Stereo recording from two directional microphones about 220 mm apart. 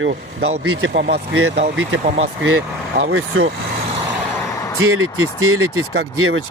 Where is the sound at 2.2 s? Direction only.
60° right (ahead or behind).